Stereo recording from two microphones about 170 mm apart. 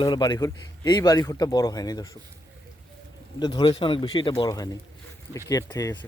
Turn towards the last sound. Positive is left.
turn(degrees=20)  # may be behind; listen again after turning